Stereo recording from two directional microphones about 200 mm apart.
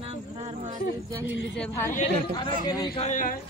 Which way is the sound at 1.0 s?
15° right (ahead or behind).